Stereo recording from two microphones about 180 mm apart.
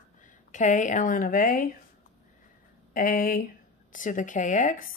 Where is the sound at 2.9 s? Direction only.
50° left (ahead or behind).